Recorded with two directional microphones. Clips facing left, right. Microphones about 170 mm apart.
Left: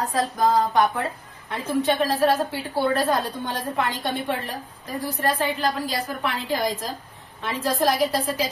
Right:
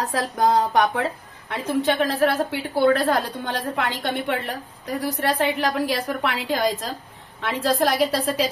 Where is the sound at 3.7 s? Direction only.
75° right (ahead or behind).